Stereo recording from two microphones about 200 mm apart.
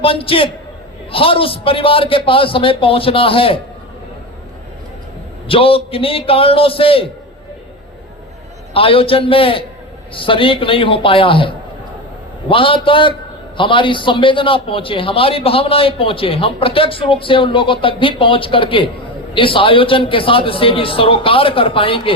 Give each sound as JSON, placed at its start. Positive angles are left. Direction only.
{"t": 0.0, "sound": "a man's voice", "side_deg": 25}
{"t": 5.5, "sound": "a man's voice", "side_deg": 25}
{"t": 8.7, "sound": "a man's voice", "side_deg": 25}